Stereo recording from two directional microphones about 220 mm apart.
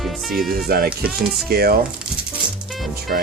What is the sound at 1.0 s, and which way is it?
Speech, centre (ahead or behind).